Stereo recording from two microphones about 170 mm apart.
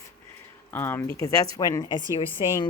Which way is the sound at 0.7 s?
15° left (ahead or behind).